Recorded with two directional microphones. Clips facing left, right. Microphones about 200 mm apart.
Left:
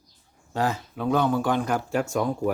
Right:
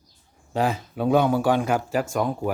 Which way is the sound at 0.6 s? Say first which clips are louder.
Right 2 dB; 15° right (ahead or behind).